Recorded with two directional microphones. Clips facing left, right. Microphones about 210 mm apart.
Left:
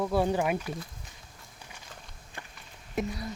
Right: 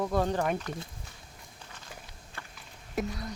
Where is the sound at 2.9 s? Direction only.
Centre (ahead or behind).